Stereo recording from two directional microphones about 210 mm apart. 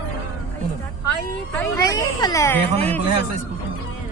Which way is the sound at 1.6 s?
15° left (ahead or behind).